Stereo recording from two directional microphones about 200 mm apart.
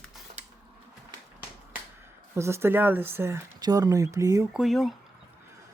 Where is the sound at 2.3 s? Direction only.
15° right (ahead or behind).